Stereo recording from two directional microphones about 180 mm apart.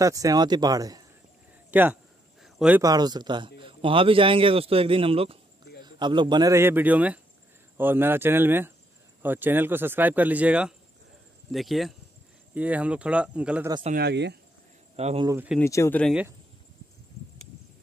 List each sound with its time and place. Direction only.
0.0 s a man's voice: 20° right (ahead or behind)
1.7 s speech: 10° right (ahead or behind)
2.4 s cricket: 5° right (ahead or behind)
2.8 s a man's voice: 20° right (ahead or behind); by 13.7 s 5° right (ahead or behind)
13.9 s speech: 70° right (ahead or behind)
15.0 s speech: 35° right (ahead or behind)
15.2 s speech: 10° right (ahead or behind)
15.6 s speech: 15° left (ahead or behind)
16.1 s speech: 5° right (ahead or behind)